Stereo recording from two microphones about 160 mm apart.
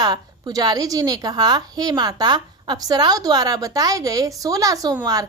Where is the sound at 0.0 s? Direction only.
25° right (ahead or behind).